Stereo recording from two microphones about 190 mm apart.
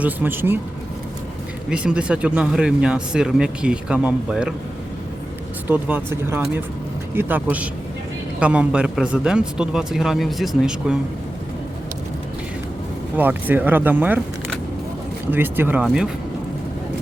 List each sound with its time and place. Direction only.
0.0 s speech: 10° right (ahead or behind)
1.7 s speech: 5° right (ahead or behind)
5.6 s speech: 10° right (ahead or behind)
13.1 s speech: 10° right (ahead or behind)
15.3 s speech: 10° right (ahead or behind)